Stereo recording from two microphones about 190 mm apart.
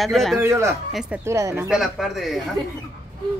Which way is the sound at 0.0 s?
Centre (ahead or behind).